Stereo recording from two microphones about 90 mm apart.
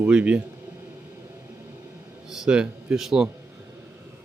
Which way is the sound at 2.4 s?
10° right (ahead or behind).